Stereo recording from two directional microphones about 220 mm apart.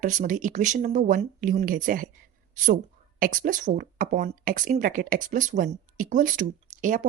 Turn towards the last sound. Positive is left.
turn(degrees=-35)  # may be behind; listen again after turning